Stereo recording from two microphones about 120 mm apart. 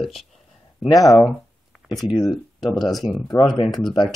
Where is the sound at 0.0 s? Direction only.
Centre (ahead or behind).